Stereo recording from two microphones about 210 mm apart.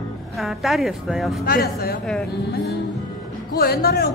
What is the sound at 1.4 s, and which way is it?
Speech, 45° left (ahead or behind).